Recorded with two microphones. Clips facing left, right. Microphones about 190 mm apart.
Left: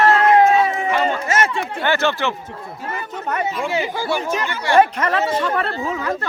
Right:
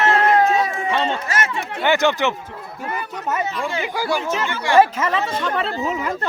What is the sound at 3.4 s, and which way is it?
Speech, 10° left (ahead or behind).